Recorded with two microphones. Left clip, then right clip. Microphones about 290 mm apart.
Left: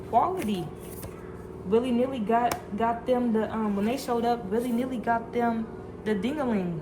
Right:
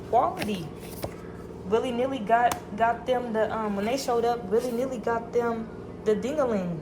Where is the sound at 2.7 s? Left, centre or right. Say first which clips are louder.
Right 1 dB; right.